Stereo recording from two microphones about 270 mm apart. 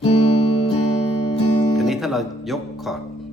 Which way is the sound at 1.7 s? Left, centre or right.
Centre.